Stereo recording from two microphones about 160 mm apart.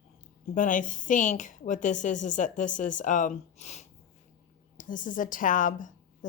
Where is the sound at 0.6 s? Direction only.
55° left (ahead or behind).